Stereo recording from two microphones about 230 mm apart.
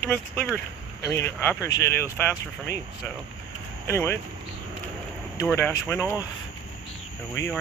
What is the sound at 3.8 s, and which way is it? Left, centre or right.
Speech, centre.